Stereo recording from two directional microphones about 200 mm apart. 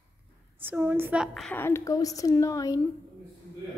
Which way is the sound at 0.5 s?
10° right (ahead or behind).